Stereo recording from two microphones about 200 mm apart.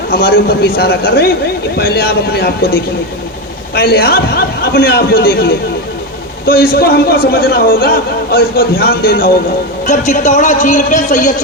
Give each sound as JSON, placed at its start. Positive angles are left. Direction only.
{"t": 0.1, "sound": "a man's voice", "side_deg": 50}
{"t": 3.8, "sound": "a man's voice", "side_deg": 50}
{"t": 9.8, "sound": "a man's voice", "side_deg": 35}